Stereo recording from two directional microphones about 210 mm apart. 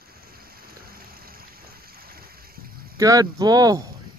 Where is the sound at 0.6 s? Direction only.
45° right (ahead or behind).